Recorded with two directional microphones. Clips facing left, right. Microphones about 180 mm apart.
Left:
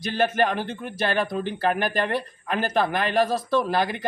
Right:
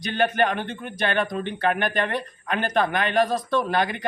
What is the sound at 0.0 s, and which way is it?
Speech, centre (ahead or behind).